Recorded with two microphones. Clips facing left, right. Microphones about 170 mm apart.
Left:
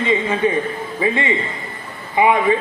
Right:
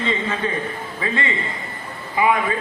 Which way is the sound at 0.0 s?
15° left (ahead or behind).